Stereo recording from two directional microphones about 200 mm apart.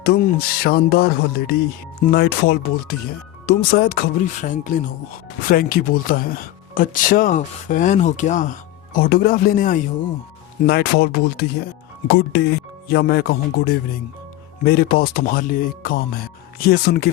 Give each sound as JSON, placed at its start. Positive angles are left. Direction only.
{"t": 0.0, "sound": "speech", "side_deg": 45}